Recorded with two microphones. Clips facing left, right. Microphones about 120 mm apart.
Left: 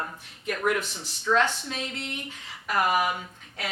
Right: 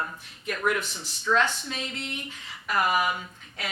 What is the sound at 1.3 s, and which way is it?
Speech, 35° left (ahead or behind).